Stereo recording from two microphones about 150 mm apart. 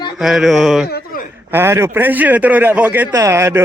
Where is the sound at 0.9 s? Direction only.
90° left.